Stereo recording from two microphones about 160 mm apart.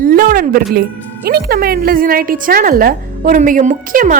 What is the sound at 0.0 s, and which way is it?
Speech, 65° right (ahead or behind).